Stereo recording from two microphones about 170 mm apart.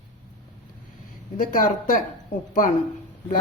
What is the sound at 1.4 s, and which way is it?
Speech, 50° left (ahead or behind).